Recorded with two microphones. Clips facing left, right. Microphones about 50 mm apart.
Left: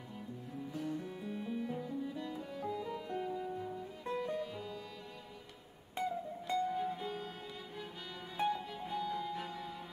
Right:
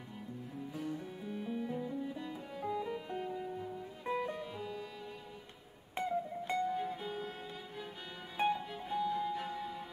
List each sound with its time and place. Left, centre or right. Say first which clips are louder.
0.7 s music: left 1 dB; centre
5.9 s music: right 2 dB; right
6.7 s music: even; centre